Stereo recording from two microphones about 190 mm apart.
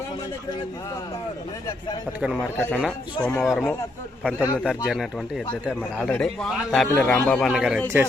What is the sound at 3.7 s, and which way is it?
Speech, 10° left (ahead or behind).